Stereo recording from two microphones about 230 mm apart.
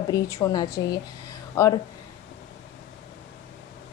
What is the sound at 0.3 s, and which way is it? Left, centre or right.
A woman's voice, centre.